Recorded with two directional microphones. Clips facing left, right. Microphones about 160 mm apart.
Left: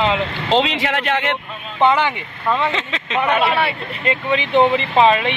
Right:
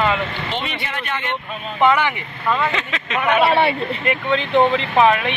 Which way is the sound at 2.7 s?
25° left (ahead or behind).